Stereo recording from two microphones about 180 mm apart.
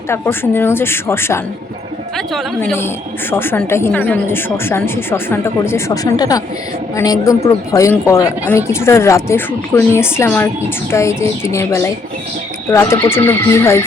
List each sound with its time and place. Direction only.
0.1 s a woman's voice: 10° left (ahead or behind)
2.1 s a woman's voice: centre (ahead or behind)